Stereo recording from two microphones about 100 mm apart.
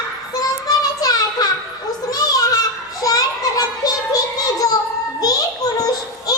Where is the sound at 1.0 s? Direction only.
40° left (ahead or behind).